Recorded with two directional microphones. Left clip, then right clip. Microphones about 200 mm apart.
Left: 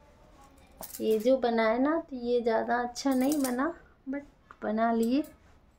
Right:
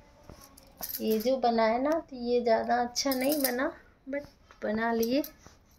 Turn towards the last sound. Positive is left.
turn(degrees=20)  # may be behind; listen again after turning